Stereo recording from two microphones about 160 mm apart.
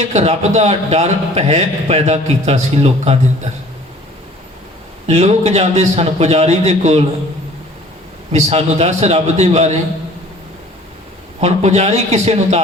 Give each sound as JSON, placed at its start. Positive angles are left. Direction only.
{"t": 0.1, "sound": "a man's voice", "side_deg": -45}
{"t": 5.0, "sound": "a man's voice", "side_deg": -45}
{"t": 8.3, "sound": "a man's voice", "side_deg": -40}
{"t": 11.3, "sound": "a man's voice", "side_deg": -40}